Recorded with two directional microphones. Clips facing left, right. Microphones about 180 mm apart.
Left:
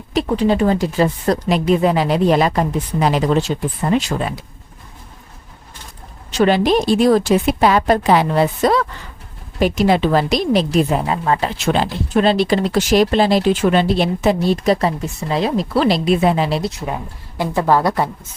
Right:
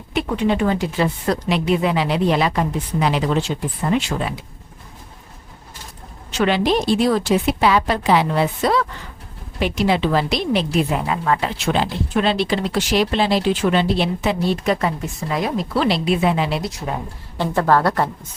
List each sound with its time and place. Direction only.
0.1 s a woman's voice: 35° left (ahead or behind)
6.3 s a woman's voice: 40° left (ahead or behind)
17.3 s a woman's voice: 10° left (ahead or behind)